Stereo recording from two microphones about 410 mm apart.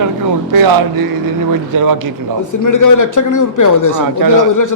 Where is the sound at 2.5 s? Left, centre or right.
Left.